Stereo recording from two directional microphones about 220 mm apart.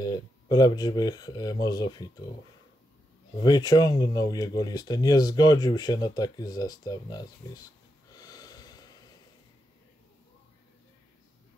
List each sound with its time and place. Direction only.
0.0 s speech: 15° left (ahead or behind)
3.4 s speech: 20° left (ahead or behind)
8.1 s snort: 15° left (ahead or behind)